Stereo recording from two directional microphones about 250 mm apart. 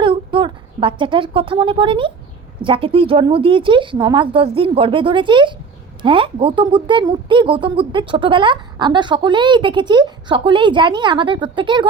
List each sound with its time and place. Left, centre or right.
0.0 s a woman's voice: centre